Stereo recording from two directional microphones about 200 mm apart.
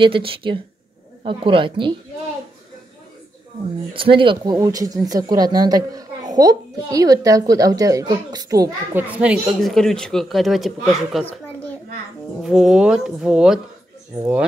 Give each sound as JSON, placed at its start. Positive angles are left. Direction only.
{"t": 0.0, "sound": "speech", "side_deg": -25}
{"t": 3.9, "sound": "a woman's voice", "side_deg": -25}
{"t": 12.4, "sound": "speech", "side_deg": 0}